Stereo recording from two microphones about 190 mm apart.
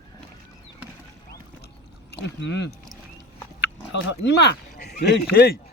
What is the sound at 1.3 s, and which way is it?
Rowboat, 60° left (ahead or behind).